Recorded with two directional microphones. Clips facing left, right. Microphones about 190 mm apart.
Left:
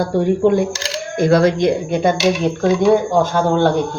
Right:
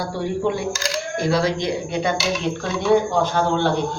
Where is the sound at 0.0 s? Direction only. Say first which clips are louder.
Left 8 dB; 50° left (ahead or behind).